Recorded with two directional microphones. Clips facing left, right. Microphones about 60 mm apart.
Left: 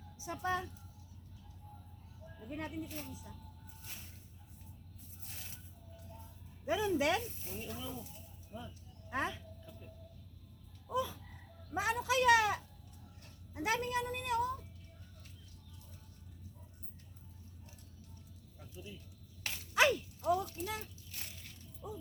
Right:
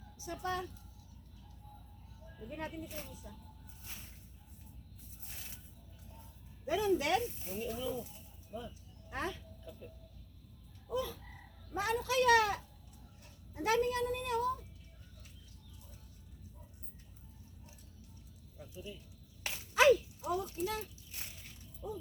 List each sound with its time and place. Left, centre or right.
0.2 s speech: left
2.2 s music: centre
3.1 s speech: centre
6.7 s speech: left
7.4 s speech: centre
8.5 s speech: centre
9.0 s speech: left
10.9 s frog: centre
11.7 s a woman's voice: centre
19.4 s a sound: right
19.7 s horse: centre
21.1 s a sound: centre
21.8 s a sound: centre